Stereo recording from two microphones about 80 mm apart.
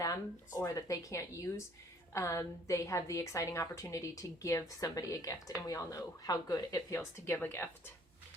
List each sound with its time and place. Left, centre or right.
0.0 s a woman's voice: left
6.9 s a woman's voice: left